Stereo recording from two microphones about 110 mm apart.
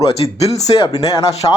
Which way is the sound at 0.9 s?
30° left (ahead or behind).